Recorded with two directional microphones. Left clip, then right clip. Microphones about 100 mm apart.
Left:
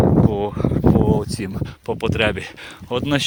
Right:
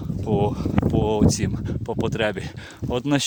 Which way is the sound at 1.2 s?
25° right (ahead or behind).